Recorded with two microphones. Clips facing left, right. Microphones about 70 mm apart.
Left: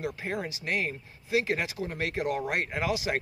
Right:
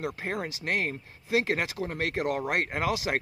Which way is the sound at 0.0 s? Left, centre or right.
Right.